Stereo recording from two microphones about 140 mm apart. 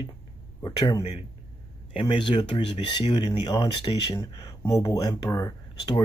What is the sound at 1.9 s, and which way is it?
Speech, 35° left (ahead or behind).